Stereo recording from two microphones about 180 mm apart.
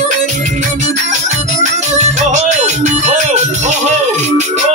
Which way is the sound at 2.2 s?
40° right (ahead or behind).